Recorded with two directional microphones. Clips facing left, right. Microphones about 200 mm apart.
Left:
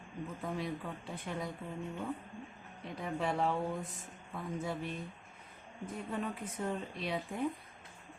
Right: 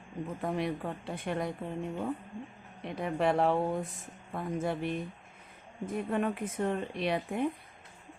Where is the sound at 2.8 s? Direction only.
65° right (ahead or behind).